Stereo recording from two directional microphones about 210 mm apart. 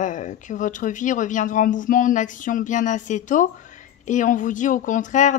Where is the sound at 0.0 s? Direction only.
35° left (ahead or behind).